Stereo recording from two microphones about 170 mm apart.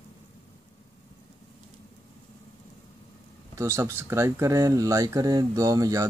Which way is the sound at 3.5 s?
15° right (ahead or behind).